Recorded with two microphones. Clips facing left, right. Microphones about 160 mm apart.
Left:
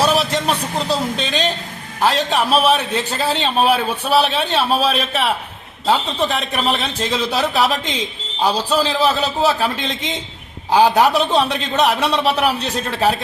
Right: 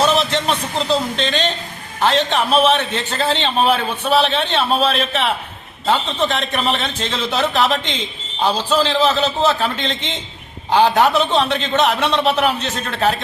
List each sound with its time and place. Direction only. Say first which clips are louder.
0.0 s a sound: even; 5° left (ahead or behind)
0.3 s a man's voice: even; 5° left (ahead or behind)
12.5 s a man's voice: left 2 dB; 35° left (ahead or behind)